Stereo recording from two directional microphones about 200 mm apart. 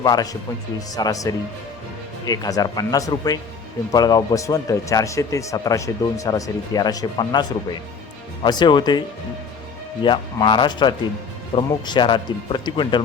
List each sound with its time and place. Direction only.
0.0 s speech: 20° left (ahead or behind)
8.4 s speech: 20° left (ahead or behind)